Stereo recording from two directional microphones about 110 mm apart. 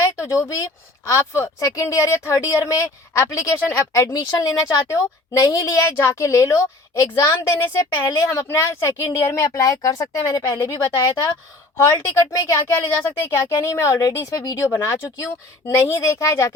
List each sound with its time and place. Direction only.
0.0 s speech: 25° left (ahead or behind)
12.3 s speech: 30° left (ahead or behind)